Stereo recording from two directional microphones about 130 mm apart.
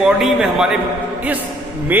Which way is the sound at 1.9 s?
10° right (ahead or behind).